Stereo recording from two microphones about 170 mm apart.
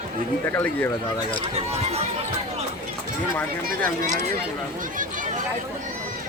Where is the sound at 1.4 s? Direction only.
40° right (ahead or behind).